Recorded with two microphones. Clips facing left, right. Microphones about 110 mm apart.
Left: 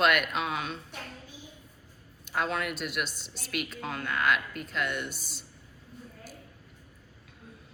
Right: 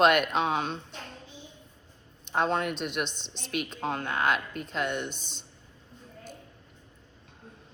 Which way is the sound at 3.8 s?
40° right (ahead or behind).